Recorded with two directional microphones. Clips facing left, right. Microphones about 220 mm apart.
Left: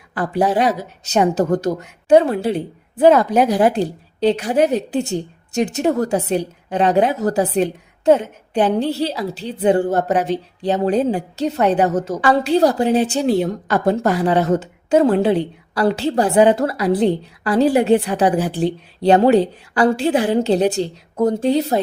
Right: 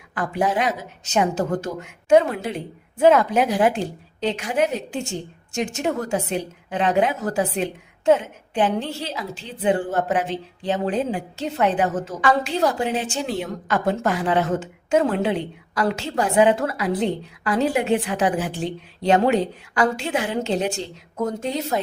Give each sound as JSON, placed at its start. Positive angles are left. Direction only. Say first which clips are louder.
{"t": 0.1, "sound": "a woman's voice", "louder": "left 5 dB", "side_deg": 35}